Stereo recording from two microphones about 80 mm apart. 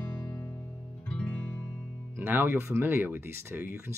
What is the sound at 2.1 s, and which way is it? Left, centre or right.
Speech, right.